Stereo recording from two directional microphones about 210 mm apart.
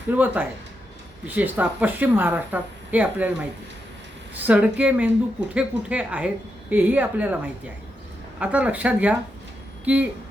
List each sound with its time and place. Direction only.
0.1 s speech: 5° right (ahead or behind)
4.4 s speech: 5° right (ahead or behind)